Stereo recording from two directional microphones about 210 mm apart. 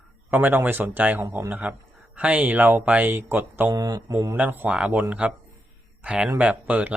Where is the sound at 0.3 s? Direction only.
10° right (ahead or behind).